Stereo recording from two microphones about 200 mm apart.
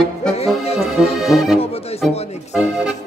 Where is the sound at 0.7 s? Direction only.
Centre (ahead or behind).